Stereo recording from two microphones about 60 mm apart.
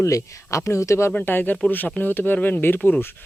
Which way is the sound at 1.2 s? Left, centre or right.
Left.